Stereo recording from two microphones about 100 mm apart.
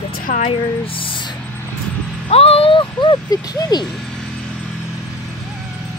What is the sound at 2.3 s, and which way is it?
Speech, 80° left.